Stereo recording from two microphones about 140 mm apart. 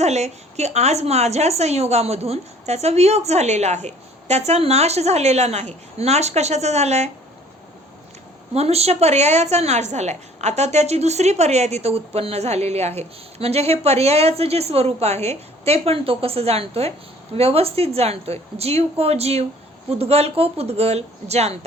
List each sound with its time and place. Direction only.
0.0 s a woman's voice: 50° right (ahead or behind)
8.5 s a woman's voice: 45° right (ahead or behind)